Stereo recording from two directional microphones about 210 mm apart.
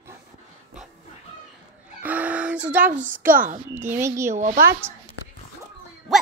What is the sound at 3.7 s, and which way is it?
Speech, 10° right (ahead or behind).